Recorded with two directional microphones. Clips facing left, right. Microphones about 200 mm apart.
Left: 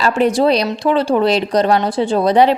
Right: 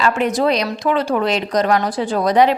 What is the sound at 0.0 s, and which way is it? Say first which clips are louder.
A woman's voice: left 3 dB; 35° left (ahead or behind).